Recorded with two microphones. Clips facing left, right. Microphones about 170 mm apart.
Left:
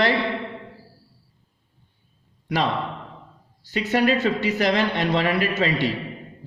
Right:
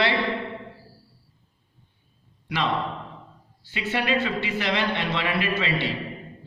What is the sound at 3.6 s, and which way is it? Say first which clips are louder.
Speech: left 7 dB; 40° left (ahead or behind).